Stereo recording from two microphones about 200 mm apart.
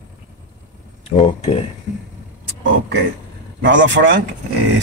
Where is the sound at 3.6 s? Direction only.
65° right (ahead or behind).